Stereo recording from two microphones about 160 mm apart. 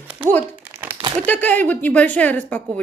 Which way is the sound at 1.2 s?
10° left (ahead or behind).